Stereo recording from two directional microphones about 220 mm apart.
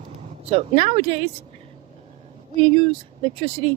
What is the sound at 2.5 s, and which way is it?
Speech, 25° right (ahead or behind).